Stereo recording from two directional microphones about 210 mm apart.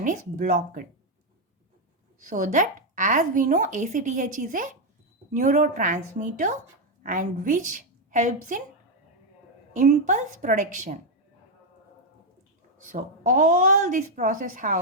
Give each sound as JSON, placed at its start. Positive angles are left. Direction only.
{"t": 0.0, "sound": "speech", "side_deg": -40}
{"t": 2.3, "sound": "a woman's voice", "side_deg": -40}
{"t": 9.7, "sound": "speech", "side_deg": -35}
{"t": 12.8, "sound": "speech", "side_deg": -40}